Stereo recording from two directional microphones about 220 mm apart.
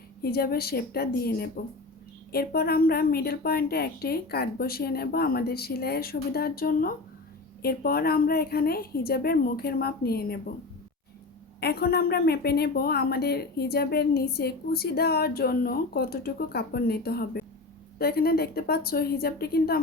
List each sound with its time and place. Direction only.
0.2 s a woman's voice: 45° left (ahead or behind)
11.6 s a woman's voice: 45° left (ahead or behind)